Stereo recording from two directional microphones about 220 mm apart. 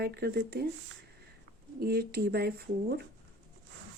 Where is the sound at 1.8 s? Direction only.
45° right (ahead or behind).